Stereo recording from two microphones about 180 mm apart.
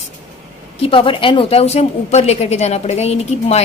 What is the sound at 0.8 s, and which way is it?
A woman's voice, 30° left (ahead or behind).